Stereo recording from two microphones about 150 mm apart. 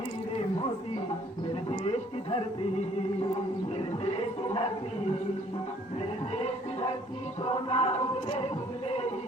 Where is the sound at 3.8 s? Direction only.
45° left (ahead or behind).